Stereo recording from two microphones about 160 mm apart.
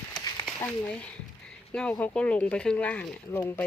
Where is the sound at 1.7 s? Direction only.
10° left (ahead or behind).